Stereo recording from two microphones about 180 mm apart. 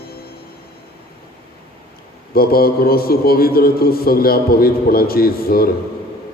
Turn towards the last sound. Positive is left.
turn(degrees=55)  # may be behind; listen again after turning